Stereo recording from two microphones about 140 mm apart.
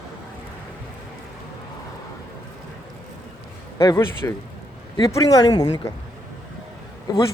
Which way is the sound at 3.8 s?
25° left (ahead or behind).